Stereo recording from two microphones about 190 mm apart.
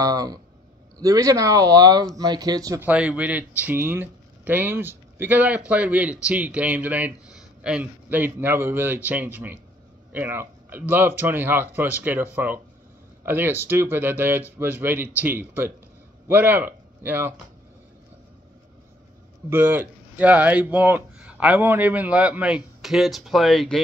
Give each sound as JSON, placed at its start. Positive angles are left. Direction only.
{"t": 0.0, "sound": "speech", "side_deg": -20}
{"t": 2.9, "sound": "a man's voice", "side_deg": -5}
{"t": 19.5, "sound": "speech", "side_deg": -10}